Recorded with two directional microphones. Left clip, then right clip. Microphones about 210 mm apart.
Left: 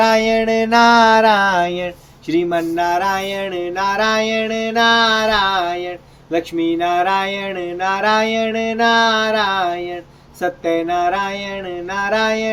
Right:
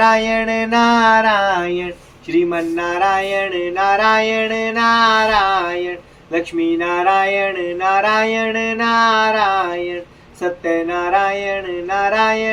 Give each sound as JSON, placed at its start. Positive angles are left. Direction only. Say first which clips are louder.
{"t": 0.0, "sound": "music", "louder": "even", "side_deg": 55}